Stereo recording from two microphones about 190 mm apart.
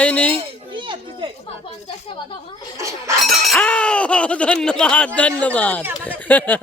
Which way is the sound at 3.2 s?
Centre (ahead or behind).